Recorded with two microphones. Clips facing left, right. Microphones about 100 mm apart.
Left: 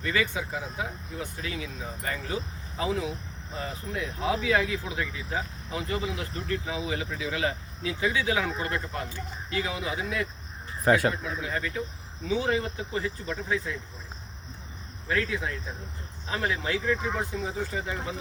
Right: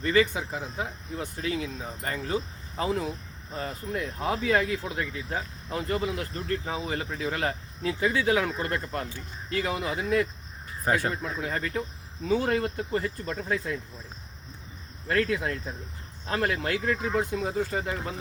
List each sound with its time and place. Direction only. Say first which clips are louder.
0.0 s speech: right 4 dB; 40° right (ahead or behind)
10.8 s speech: left 4 dB; 90° left
11.2 s speech: right 1 dB; 50° right (ahead or behind)
15.1 s speech: right 3 dB; 55° right (ahead or behind)